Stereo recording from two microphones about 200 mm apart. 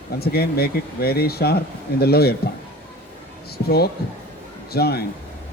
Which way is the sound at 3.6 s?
50° left (ahead or behind).